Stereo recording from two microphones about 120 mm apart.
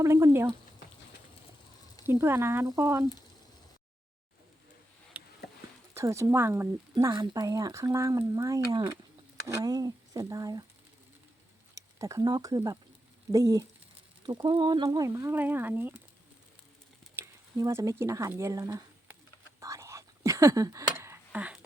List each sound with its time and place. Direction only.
0.0 s speech: 25° right (ahead or behind)
2.0 s speech: 20° right (ahead or behind)
5.2 s a sound: 10° right (ahead or behind)
5.9 s speech: 25° right (ahead or behind)
7.1 s speech: 35° right (ahead or behind)
11.7 s speech: 25° right (ahead or behind)
14.3 s speech: 45° right (ahead or behind); by 16.0 s 15° right (ahead or behind)
17.2 s mechanisms: 15° right (ahead or behind)
17.6 s speech: 25° right (ahead or behind)
19.5 s whispering: 25° right (ahead or behind)